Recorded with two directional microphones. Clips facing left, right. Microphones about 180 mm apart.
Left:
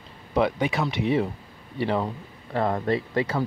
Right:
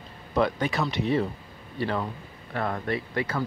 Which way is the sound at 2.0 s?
30° left (ahead or behind).